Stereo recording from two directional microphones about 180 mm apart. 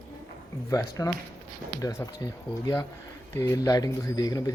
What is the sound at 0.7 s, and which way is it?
Speech, 20° left (ahead or behind).